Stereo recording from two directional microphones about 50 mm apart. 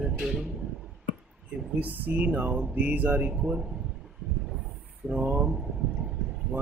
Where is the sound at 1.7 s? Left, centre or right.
Right.